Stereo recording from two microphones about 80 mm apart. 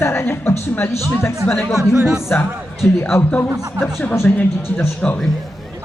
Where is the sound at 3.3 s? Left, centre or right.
Left.